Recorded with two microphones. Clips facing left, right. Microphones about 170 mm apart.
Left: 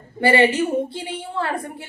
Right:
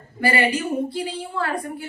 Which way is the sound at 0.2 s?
25° left (ahead or behind).